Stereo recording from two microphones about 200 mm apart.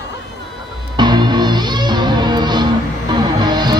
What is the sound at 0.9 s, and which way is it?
Music, 20° right (ahead or behind).